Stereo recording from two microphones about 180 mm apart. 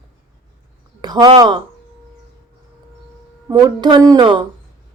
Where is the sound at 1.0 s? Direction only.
25° right (ahead or behind).